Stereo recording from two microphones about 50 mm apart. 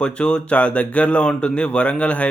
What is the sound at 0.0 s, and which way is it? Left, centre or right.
Speech, left.